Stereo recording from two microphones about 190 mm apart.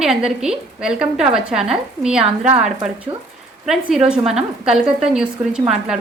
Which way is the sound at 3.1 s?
25° right (ahead or behind).